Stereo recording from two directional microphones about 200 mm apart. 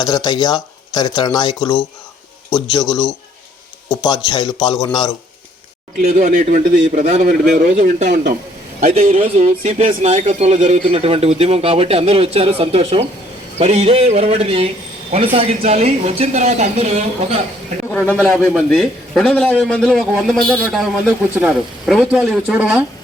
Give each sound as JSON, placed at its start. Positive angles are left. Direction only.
{"t": 0.0, "sound": "speech", "side_deg": 20}
{"t": 2.8, "sound": "a man's voice", "side_deg": 0}
{"t": 4.0, "sound": "speech", "side_deg": 20}
{"t": 6.0, "sound": "speech", "side_deg": -35}
{"t": 18.1, "sound": "a man's voice", "side_deg": 0}